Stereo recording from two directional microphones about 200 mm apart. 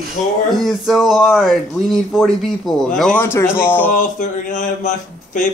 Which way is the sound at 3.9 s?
40° left (ahead or behind).